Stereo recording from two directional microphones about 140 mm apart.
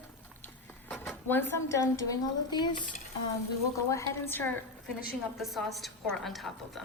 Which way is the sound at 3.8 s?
20° left (ahead or behind).